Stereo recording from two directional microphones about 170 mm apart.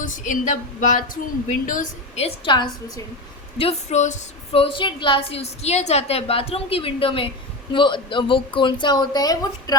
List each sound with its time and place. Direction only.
0.0 s a woman's voice: 50° left (ahead or behind); by 3.0 s 25° left (ahead or behind)
3.6 s a woman's voice: 40° left (ahead or behind); by 9.7 s 20° left (ahead or behind)